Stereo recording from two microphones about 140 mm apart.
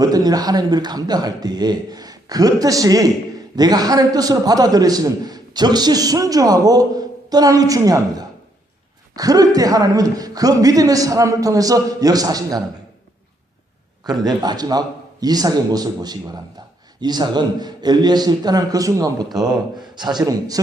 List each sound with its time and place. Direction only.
0.0 s a man's voice: 25° right (ahead or behind)
14.0 s a man's voice: 30° right (ahead or behind)